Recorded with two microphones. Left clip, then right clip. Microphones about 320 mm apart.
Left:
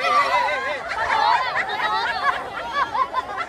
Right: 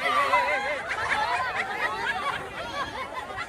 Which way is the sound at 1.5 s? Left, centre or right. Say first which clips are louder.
Left 6 dB; left.